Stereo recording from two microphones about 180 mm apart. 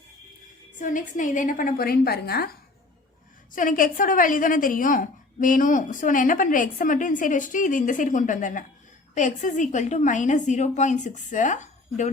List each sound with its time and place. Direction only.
0.8 s a woman's voice: 45° left (ahead or behind)
3.5 s a woman's voice: 50° left (ahead or behind)